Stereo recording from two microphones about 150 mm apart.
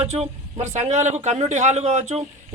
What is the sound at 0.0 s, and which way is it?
A man's voice, 45° right (ahead or behind).